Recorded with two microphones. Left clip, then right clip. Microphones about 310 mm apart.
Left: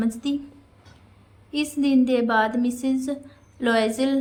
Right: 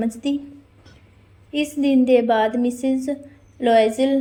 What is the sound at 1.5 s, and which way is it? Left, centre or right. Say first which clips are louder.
A woman's voice: right 3 dB; centre.